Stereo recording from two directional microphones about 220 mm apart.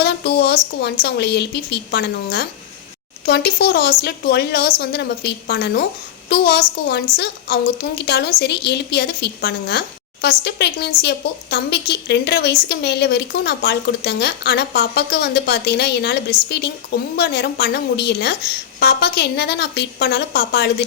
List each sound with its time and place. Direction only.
0.0 s a woman's voice: 50° left (ahead or behind)